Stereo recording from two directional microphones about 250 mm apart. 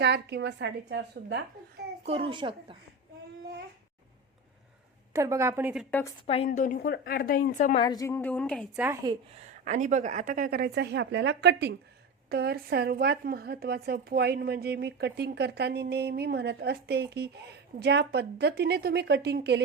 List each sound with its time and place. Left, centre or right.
0.0 s a woman's voice: right
2.0 s a child's voice: right
5.1 s a woman's voice: centre
5.9 s a woman's voice: centre
6.2 s a woman's voice: left
7.9 s a woman's voice: centre
9.0 s speech: right